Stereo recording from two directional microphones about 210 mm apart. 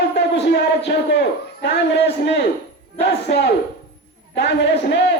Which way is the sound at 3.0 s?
55° left (ahead or behind).